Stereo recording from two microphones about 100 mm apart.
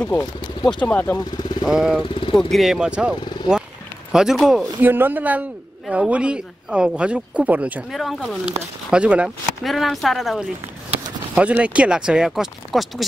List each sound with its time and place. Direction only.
0.2 s speech: 50° left (ahead or behind)
0.7 s speech: 15° left (ahead or behind)
1.1 s speech: 40° left (ahead or behind)
1.7 s speech: 5° right (ahead or behind)
4.8 s a man's voice: 20° right (ahead or behind)
7.9 s speech: centre (ahead or behind)
8.9 s a man's voice: 10° right (ahead or behind)
9.6 s a man's voice: centre (ahead or behind)